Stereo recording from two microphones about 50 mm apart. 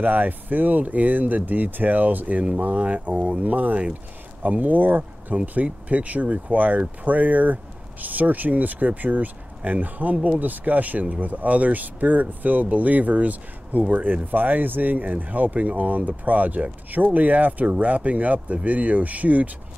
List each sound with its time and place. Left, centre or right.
0.0 s speech: right